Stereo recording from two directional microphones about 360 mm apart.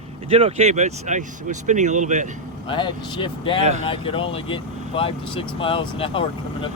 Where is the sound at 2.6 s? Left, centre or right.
Centre.